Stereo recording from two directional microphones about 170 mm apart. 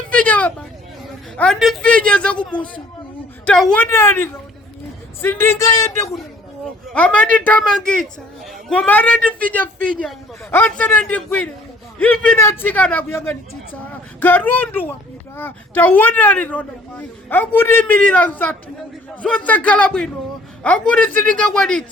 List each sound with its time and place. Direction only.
0.1 s a sound: 5° left (ahead or behind)
1.4 s speech: centre (ahead or behind); by 5.9 s 20° left (ahead or behind)
6.9 s speech: 10° left (ahead or behind)